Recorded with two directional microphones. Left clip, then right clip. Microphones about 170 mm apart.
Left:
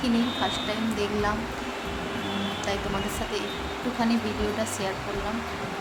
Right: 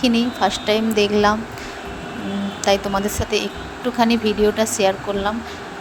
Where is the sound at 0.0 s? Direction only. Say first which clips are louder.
Right 8 dB; 55° right (ahead or behind).